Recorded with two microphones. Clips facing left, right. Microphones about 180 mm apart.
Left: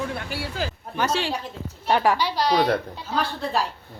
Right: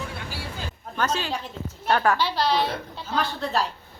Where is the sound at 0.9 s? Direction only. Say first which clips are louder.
Left 1 dB; 10° left (ahead or behind).